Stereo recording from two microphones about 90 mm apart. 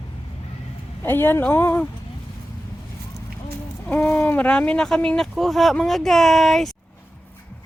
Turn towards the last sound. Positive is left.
turn(degrees=5)  # may be behind; listen again after turning